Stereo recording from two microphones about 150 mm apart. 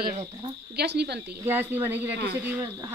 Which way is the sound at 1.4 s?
15° right (ahead or behind).